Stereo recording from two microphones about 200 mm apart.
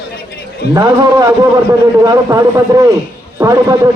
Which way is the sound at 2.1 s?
15° right (ahead or behind).